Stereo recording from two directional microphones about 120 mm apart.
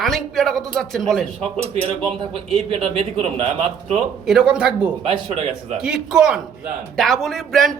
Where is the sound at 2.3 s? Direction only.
55° right (ahead or behind).